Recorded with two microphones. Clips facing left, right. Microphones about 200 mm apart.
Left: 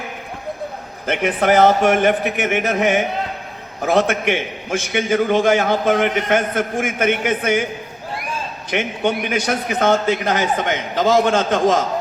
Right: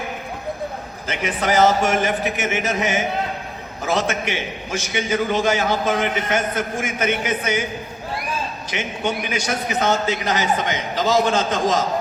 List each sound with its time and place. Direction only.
1.0 s a man's voice: 55° left (ahead or behind)
8.7 s a man's voice: 55° left (ahead or behind)